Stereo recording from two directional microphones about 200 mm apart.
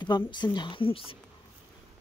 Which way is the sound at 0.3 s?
20° left (ahead or behind).